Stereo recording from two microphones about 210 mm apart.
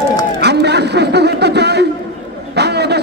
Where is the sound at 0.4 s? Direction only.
55° right (ahead or behind).